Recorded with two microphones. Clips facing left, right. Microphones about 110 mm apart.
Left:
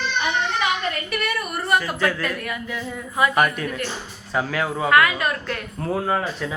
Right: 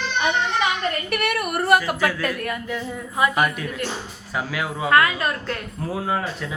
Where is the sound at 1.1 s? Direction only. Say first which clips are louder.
Right 3 dB; 65° right (ahead or behind).